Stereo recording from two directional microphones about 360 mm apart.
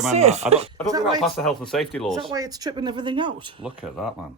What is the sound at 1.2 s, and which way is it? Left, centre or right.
Speech, centre.